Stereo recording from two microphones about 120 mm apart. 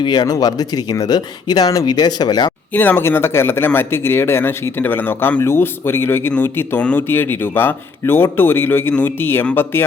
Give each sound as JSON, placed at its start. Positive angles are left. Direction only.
{"t": 0.0, "sound": "speech", "side_deg": 35}
{"t": 2.7, "sound": "speech", "side_deg": 15}